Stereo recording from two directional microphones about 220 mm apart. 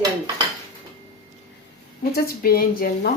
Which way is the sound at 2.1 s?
45° left (ahead or behind).